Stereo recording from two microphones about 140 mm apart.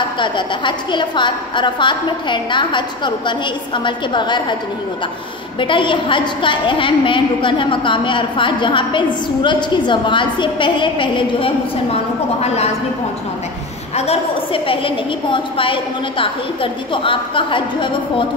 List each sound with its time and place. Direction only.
0.2 s a woman's voice: 35° left (ahead or behind)
5.6 s a woman's voice: 35° left (ahead or behind)
13.9 s a woman's voice: 45° left (ahead or behind)